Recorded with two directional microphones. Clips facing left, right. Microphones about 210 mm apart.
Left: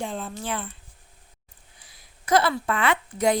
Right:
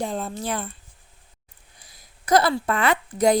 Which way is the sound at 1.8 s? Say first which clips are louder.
Right 2 dB; 40° right (ahead or behind).